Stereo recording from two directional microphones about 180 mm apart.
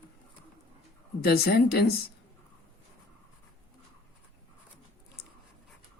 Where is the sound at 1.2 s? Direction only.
60° left (ahead or behind).